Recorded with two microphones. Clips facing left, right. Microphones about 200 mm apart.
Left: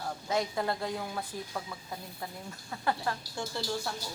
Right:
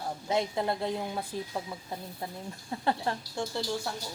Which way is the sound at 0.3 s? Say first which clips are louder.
Right 2 dB; 25° right (ahead or behind).